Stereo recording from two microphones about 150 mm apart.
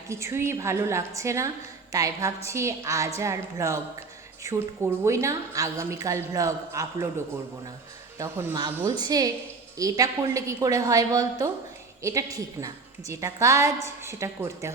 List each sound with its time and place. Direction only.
0.1 s a woman's voice: 20° right (ahead or behind)
8.2 s a woman's voice: 15° right (ahead or behind)